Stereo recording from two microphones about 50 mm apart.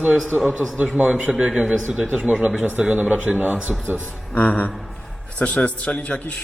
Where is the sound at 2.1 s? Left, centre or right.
Right.